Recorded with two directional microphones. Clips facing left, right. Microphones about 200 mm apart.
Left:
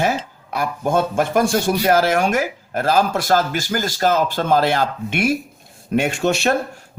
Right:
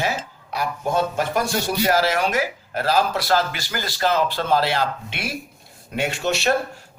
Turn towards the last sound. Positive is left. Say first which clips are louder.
# left 3 dB
turn(degrees=50)  # may be behind; listen again after turning